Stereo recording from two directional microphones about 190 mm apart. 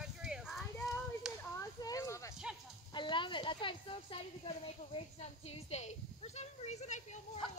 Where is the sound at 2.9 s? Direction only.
25° left (ahead or behind).